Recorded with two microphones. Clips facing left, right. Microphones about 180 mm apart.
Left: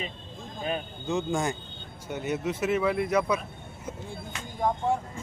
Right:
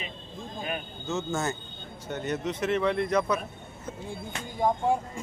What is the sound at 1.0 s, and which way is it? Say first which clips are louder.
Speech: left 2 dB; 15° left (ahead or behind).